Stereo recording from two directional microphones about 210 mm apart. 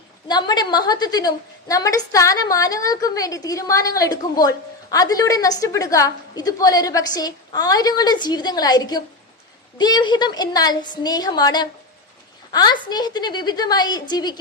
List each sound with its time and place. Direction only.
0.3 s a woman's voice: 20° left (ahead or behind)